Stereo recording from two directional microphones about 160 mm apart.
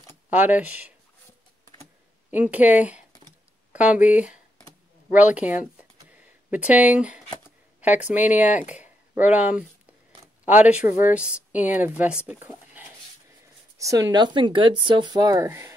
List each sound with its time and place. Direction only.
0.3 s speech: 10° right (ahead or behind)
2.3 s speech: 10° right (ahead or behind)
5.1 s a sound: 10° right (ahead or behind)
7.8 s speech: 10° right (ahead or behind)
12.3 s a sound: 10° right (ahead or behind)
13.7 s speech: 20° right (ahead or behind)